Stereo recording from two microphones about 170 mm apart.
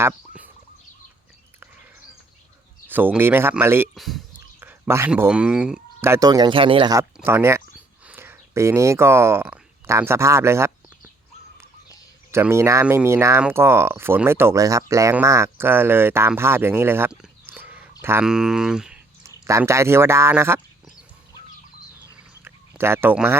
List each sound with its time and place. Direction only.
0.0 s speech: 10° right (ahead or behind)
2.8 s speech: 10° right (ahead or behind)
3.9 s speech: centre (ahead or behind)
4.4 s a sound: 15° right (ahead or behind)
6.1 s speech: 20° right (ahead or behind)
7.2 s speech: 15° right (ahead or behind)
12.3 s speech: 15° right (ahead or behind)
19.5 s speech: 15° right (ahead or behind)
22.8 s speech: 15° right (ahead or behind)